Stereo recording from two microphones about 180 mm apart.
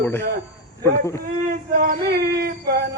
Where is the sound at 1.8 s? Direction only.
55° right (ahead or behind).